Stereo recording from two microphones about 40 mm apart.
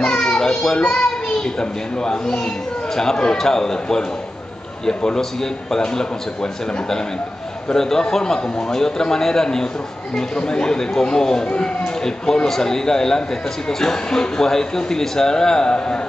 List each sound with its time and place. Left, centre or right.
0.0 s children playing: left
0.7 s a child's voice: centre